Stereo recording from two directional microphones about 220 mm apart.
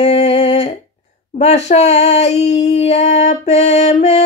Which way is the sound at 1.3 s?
30° left (ahead or behind).